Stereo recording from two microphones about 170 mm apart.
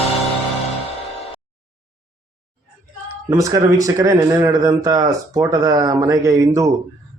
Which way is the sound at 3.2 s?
20° right (ahead or behind).